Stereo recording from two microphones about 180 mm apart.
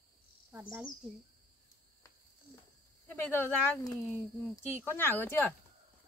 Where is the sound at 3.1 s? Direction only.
10° left (ahead or behind).